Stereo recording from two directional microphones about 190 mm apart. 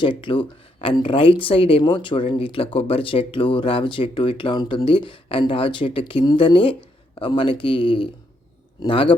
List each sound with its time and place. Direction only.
0.0 s speech: 25° left (ahead or behind)